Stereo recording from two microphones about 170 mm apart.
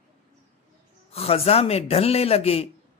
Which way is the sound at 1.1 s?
35° left (ahead or behind).